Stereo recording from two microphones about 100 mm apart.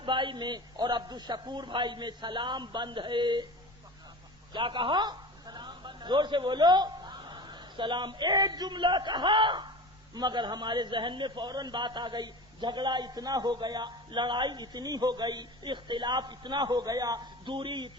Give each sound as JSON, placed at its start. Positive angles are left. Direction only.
{"t": 0.0, "sound": "a man's voice", "side_deg": -55}
{"t": 4.5, "sound": "a man's voice", "side_deg": -55}
{"t": 17.5, "sound": "a man's voice", "side_deg": -50}